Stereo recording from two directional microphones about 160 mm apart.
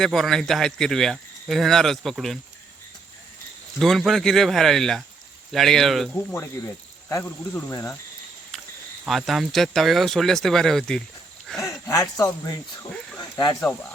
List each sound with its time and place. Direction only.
0.0 s speech: centre (ahead or behind)
3.8 s speech: centre (ahead or behind)
7.1 s speech: 15° left (ahead or behind)
9.0 s speech: centre (ahead or behind)
11.4 s a sound: centre (ahead or behind)
11.7 s speech: 20° left (ahead or behind)
13.1 s snake: 20° left (ahead or behind)